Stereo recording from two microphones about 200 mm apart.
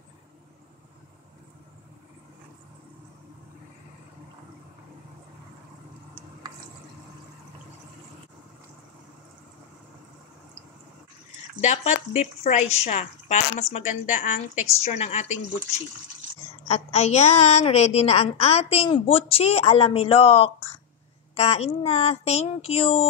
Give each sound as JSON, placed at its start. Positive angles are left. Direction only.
{"t": 11.6, "sound": "a woman's voice", "side_deg": 35}
{"t": 16.6, "sound": "a woman's voice", "side_deg": 30}